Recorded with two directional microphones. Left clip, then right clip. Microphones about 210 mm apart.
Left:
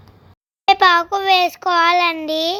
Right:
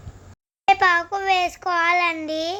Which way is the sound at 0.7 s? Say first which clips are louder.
Left 5 dB; 15° left (ahead or behind).